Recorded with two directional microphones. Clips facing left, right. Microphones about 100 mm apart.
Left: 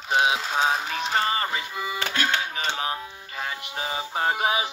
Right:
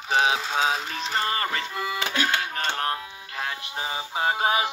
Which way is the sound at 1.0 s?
20° left (ahead or behind).